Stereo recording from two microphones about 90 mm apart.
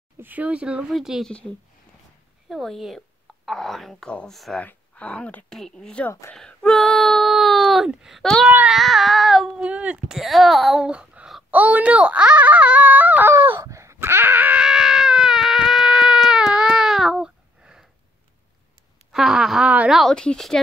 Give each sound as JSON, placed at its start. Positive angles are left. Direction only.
{"t": 0.2, "sound": "speech", "side_deg": -15}
{"t": 1.2, "sound": "speech", "side_deg": 10}
{"t": 2.5, "sound": "speech", "side_deg": 0}
{"t": 4.6, "sound": "speech", "side_deg": 15}
{"t": 6.3, "sound": "a sound", "side_deg": 5}
{"t": 8.5, "sound": "speech", "side_deg": -15}
{"t": 8.7, "sound": "child singing", "side_deg": 0}
{"t": 9.6, "sound": "speech", "side_deg": -15}
{"t": 13.3, "sound": "a sound", "side_deg": -25}
{"t": 13.7, "sound": "wail", "side_deg": -35}
{"t": 19.1, "sound": "speech", "side_deg": -5}